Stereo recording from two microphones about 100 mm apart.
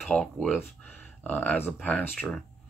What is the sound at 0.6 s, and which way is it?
Speech, 20° left (ahead or behind).